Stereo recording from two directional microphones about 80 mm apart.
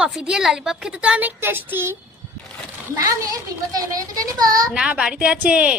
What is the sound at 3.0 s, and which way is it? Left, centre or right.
A child's voice, right.